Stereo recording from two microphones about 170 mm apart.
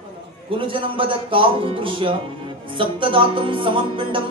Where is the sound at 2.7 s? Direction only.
30° right (ahead or behind).